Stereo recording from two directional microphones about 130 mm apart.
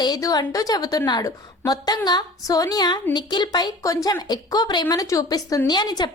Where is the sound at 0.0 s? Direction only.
30° left (ahead or behind).